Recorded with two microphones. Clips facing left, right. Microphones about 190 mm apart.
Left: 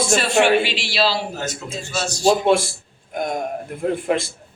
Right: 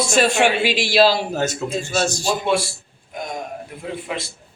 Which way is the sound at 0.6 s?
45° right (ahead or behind).